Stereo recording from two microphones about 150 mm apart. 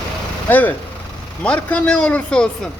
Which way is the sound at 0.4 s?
10° left (ahead or behind).